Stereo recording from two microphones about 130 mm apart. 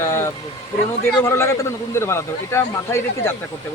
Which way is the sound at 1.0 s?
20° left (ahead or behind).